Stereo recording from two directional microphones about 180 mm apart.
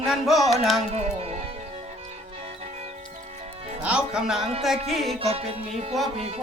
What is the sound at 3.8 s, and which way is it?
Music, 5° right (ahead or behind).